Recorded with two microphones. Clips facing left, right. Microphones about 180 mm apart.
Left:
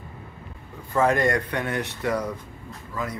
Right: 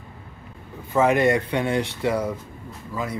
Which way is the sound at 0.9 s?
20° right (ahead or behind).